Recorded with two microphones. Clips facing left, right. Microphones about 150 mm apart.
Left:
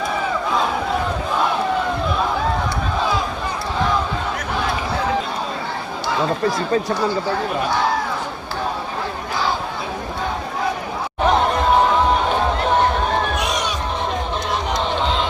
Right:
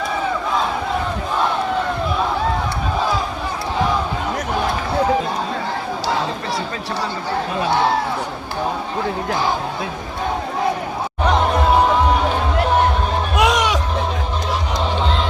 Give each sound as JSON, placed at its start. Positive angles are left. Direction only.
{"t": 13.4, "sound": "music", "side_deg": -90}